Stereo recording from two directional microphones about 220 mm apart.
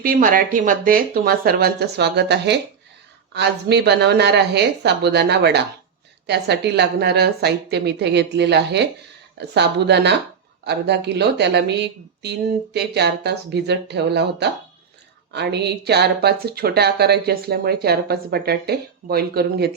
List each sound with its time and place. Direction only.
0.0 s speech: 40° right (ahead or behind)